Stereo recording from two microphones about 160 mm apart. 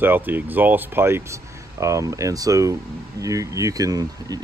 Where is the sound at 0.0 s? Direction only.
10° right (ahead or behind).